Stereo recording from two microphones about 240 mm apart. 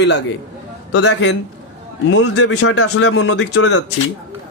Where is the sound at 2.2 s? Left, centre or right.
Left.